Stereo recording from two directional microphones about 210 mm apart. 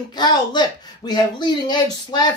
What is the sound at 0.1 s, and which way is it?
Speech, 20° left (ahead or behind).